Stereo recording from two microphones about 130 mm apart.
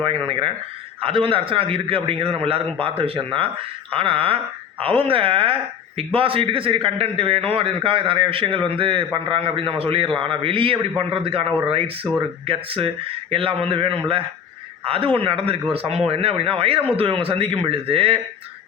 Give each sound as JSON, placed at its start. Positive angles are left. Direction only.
{"t": 0.0, "sound": "a man's voice", "side_deg": -45}